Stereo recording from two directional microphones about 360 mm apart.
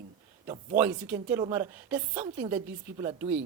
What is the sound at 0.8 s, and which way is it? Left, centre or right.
A woman's voice, centre.